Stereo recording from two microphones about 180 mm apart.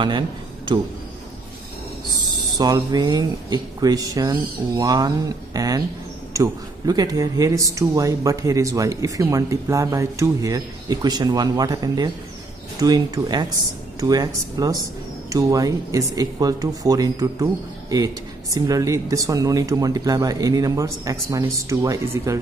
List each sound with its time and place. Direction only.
2.5 s speech: 20° right (ahead or behind)